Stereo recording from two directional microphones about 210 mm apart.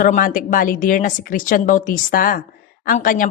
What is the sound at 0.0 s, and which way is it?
A woman's voice, 40° left (ahead or behind).